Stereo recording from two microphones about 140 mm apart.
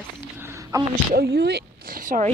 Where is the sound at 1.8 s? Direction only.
75° right (ahead or behind).